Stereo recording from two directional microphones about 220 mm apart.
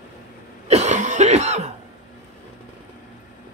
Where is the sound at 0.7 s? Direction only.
30° right (ahead or behind).